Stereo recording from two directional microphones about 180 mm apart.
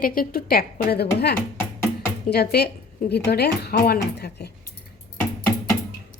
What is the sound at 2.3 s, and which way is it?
Speech, 60° left (ahead or behind).